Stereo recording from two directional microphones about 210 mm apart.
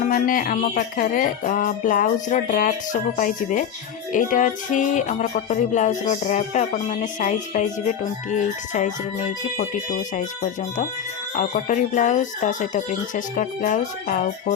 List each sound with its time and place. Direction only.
0.0 s music: 40° left (ahead or behind)
11.3 s music: 35° left (ahead or behind)